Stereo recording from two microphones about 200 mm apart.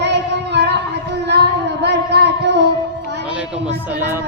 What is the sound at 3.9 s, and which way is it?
Music, 10° right (ahead or behind).